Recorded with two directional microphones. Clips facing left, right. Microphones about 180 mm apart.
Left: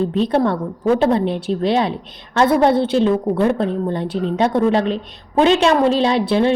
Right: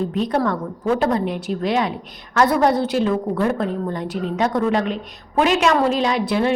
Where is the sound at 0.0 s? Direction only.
30° left (ahead or behind).